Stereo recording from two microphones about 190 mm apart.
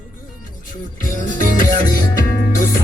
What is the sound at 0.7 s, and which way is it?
Music, 45° left (ahead or behind).